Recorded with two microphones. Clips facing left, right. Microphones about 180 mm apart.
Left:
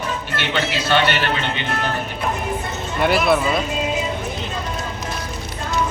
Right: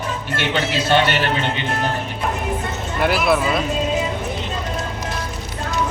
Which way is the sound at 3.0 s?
Centre (ahead or behind).